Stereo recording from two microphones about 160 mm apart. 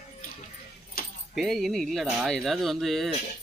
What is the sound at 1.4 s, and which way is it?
A man's voice, centre (ahead or behind).